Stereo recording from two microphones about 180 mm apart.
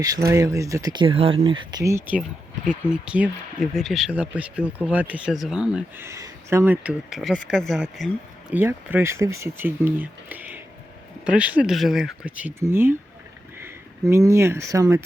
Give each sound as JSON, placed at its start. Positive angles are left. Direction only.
{"t": 0.3, "sound": "speech", "side_deg": -15}